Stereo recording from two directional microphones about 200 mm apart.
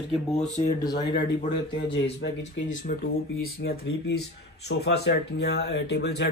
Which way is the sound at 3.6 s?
55° left (ahead or behind).